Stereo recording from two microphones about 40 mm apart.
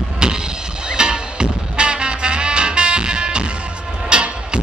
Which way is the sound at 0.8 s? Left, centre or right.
Centre.